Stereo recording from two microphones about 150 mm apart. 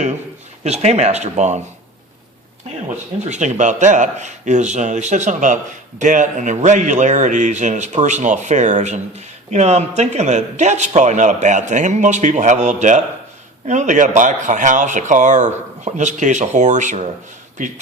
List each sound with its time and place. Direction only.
0.6 s speech: 45° right (ahead or behind)
3.2 s speech: 50° right (ahead or behind)